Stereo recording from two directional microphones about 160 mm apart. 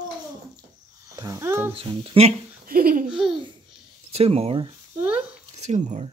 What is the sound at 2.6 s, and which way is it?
Laughter, 65° right (ahead or behind).